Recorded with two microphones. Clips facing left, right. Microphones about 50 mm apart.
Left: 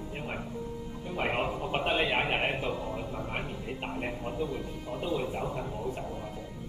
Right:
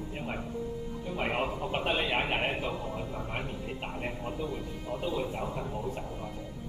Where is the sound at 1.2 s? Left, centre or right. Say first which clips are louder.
Left 1 dB; centre.